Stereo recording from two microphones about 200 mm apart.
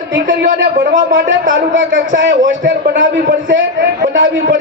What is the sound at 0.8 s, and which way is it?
Speech, 40° right (ahead or behind).